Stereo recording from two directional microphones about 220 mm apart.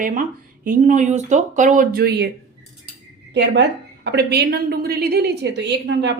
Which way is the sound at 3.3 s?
50° right (ahead or behind).